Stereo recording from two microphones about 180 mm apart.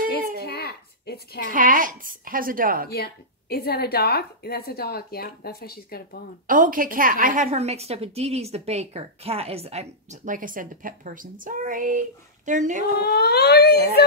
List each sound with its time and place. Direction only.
0.4 s a sound: 60° left (ahead or behind)
1.5 s a woman's voice: 50° right (ahead or behind)
2.9 s a woman's voice: 60° left (ahead or behind)
6.4 s a woman's voice: 50° right (ahead or behind)
13.0 s a woman's voice: 65° left (ahead or behind)